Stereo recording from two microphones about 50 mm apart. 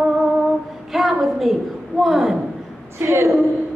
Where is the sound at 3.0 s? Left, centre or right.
Right.